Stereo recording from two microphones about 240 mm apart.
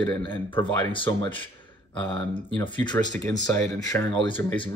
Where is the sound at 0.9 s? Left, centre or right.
Left.